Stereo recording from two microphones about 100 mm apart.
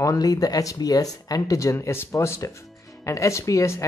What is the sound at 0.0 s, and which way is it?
Speech, 35° left (ahead or behind).